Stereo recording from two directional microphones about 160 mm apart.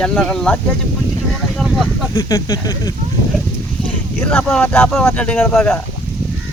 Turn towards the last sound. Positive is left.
turn(degrees=5)  # may be behind; listen again after turning